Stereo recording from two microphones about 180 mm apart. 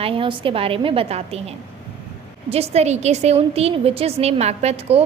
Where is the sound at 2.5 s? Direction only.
35° right (ahead or behind).